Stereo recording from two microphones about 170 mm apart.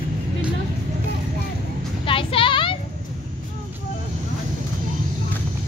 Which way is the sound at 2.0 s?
30° left (ahead or behind).